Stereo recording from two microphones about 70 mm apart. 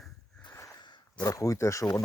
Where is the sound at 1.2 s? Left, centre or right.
Left.